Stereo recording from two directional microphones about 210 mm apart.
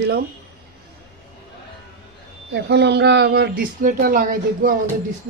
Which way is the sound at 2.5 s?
55° right (ahead or behind).